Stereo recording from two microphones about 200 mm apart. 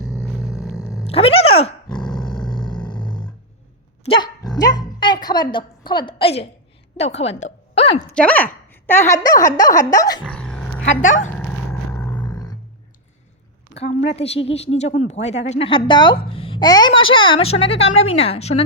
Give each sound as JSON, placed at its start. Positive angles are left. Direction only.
{"t": 0.0, "sound": "a sound", "side_deg": -5}
{"t": 1.1, "sound": "dog", "side_deg": 30}
{"t": 4.0, "sound": "speech", "side_deg": 25}
{"t": 8.1, "sound": "a woman's voice", "side_deg": 5}
{"t": 9.4, "sound": "speech", "side_deg": 40}
{"t": 9.9, "sound": "speech", "side_deg": 20}
{"t": 10.2, "sound": "dog", "side_deg": 5}
{"t": 11.0, "sound": "speech", "side_deg": 40}
{"t": 11.3, "sound": "roar", "side_deg": 15}
{"t": 14.1, "sound": "speech", "side_deg": 30}